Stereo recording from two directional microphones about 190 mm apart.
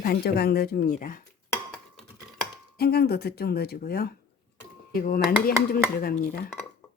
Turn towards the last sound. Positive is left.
turn(degrees=55)  # may be behind; listen again after turning